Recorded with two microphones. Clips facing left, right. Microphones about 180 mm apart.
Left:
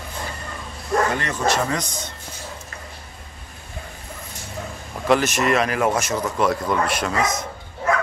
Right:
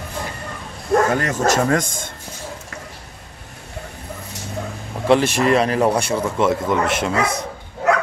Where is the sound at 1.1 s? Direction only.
45° right (ahead or behind).